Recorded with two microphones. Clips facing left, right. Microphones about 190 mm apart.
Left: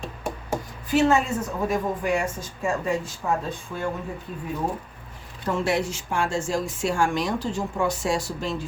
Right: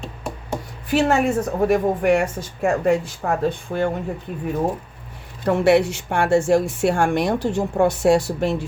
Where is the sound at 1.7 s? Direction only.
65° right (ahead or behind).